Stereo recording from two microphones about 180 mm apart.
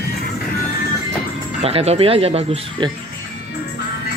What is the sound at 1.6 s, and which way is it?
Speech, 35° right (ahead or behind).